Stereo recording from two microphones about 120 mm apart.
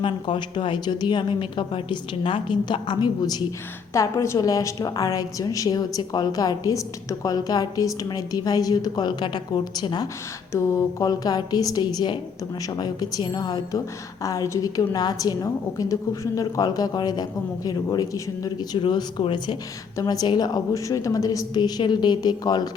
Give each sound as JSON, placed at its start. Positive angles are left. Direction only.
{"t": 0.0, "sound": "a woman's voice", "side_deg": 40}
{"t": 10.5, "sound": "a woman's voice", "side_deg": 25}